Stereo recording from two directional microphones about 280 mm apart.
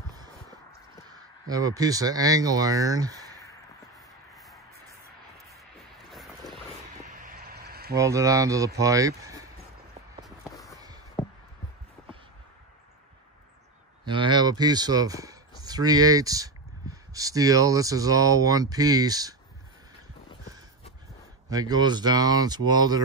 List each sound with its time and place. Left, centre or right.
1.1 s speech: centre
6.0 s boat: centre
7.2 s vehicle: right
7.9 s speech: centre
10.2 s a sound: centre
14.0 s a sound: centre
17.1 s speech: centre
21.5 s speech: centre